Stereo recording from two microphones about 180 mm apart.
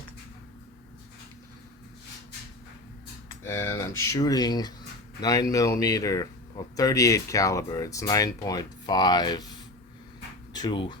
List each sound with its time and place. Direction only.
3.4 s speech: 15° left (ahead or behind)